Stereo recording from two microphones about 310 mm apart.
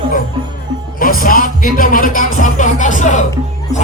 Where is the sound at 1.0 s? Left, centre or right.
Left.